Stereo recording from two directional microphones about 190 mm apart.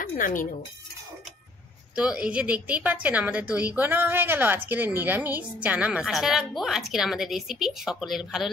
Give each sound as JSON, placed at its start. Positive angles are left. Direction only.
{"t": 0.0, "sound": "speech", "side_deg": 45}
{"t": 2.0, "sound": "a woman's voice", "side_deg": -5}